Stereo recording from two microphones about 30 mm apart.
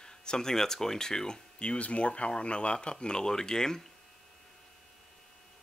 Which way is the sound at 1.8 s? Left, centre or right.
Left.